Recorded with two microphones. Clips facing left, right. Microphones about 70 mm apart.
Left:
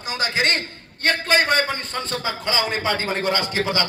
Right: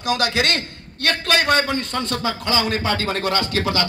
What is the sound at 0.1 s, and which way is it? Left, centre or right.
A man's voice, left.